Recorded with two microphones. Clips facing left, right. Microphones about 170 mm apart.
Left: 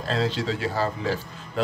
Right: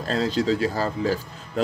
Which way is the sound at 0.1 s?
40° right (ahead or behind).